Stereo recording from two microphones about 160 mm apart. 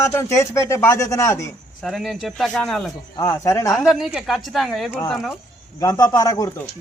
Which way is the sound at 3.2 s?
15° left (ahead or behind).